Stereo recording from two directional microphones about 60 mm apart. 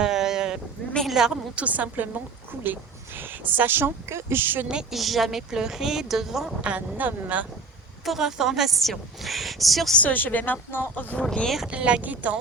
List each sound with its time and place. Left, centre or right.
0.0 s sheep: centre
1.0 s a sound: centre
1.5 s speech: right
3.2 s speech: right
4.7 s a woman's voice: centre
6.6 s speech: right
8.0 s a woman's voice: centre
10.1 s speech: left
11.4 s a woman's voice: centre
11.7 s speech: centre